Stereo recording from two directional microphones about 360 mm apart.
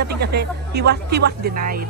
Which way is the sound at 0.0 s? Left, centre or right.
Right.